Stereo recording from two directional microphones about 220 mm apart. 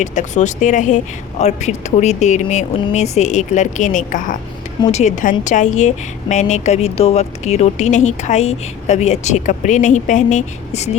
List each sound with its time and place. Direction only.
0.0 s a woman's voice: 35° left (ahead or behind)